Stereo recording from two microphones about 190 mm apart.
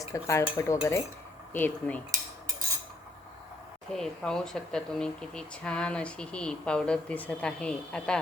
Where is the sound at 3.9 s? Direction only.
5° left (ahead or behind).